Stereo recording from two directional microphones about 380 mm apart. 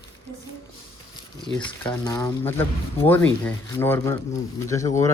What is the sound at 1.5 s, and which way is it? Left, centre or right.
A woman's voice, centre.